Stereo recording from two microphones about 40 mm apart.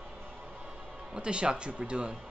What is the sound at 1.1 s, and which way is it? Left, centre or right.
Speech, right.